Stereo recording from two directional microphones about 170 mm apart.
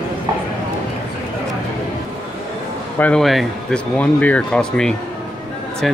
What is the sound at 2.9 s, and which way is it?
Speech, 5° left (ahead or behind).